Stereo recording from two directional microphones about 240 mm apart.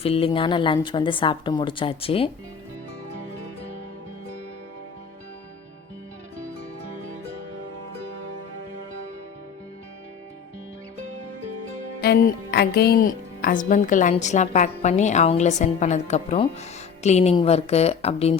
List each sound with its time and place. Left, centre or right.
0.0 s a woman's voice: left
11.9 s a woman's voice: left